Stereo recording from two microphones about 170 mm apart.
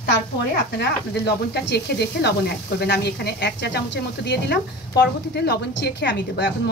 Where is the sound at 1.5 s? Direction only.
75° left (ahead or behind).